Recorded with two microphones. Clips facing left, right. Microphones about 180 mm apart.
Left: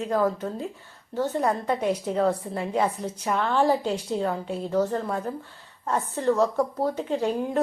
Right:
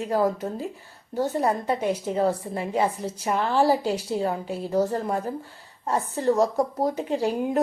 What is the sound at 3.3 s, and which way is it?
Speech, 35° right (ahead or behind).